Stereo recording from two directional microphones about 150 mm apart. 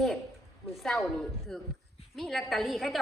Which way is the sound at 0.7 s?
Centre (ahead or behind).